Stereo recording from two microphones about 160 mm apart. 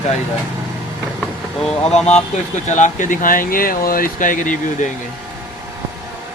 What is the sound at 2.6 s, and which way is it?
Speech, 50° left (ahead or behind).